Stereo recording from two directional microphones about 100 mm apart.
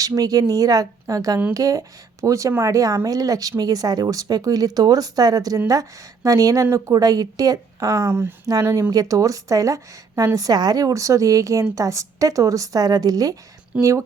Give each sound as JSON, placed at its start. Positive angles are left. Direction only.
{"t": 0.0, "sound": "a woman's voice", "side_deg": -35}
{"t": 13.7, "sound": "speech", "side_deg": -15}